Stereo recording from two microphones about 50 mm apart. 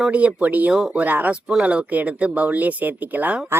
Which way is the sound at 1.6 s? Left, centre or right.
Right.